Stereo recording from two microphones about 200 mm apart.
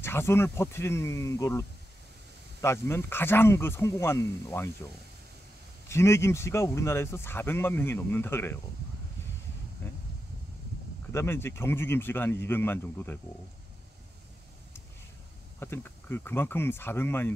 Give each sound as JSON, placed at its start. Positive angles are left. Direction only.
{"t": 0.0, "sound": "speech", "side_deg": 10}
{"t": 5.9, "sound": "speech", "side_deg": 15}
{"t": 9.8, "sound": "a sound", "side_deg": 10}
{"t": 11.1, "sound": "speech", "side_deg": 10}
{"t": 15.6, "sound": "speech", "side_deg": 10}